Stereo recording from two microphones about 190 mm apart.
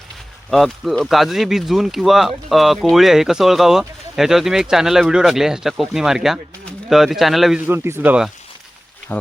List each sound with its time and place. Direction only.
0.5 s speech: centre (ahead or behind)
7.7 s speech: 10° right (ahead or behind)